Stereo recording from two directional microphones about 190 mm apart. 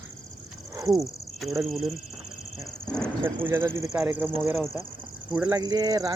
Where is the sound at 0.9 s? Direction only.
Centre (ahead or behind).